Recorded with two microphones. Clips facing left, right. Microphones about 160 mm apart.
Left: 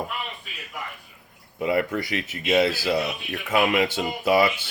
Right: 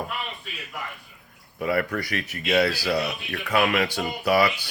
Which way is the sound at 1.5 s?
20° left (ahead or behind).